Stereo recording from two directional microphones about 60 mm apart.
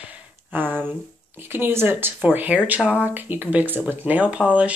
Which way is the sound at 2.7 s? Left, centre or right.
Centre.